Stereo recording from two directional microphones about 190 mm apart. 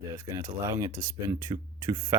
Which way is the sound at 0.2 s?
15° right (ahead or behind).